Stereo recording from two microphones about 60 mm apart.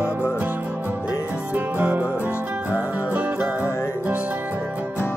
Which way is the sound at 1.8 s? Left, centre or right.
Right.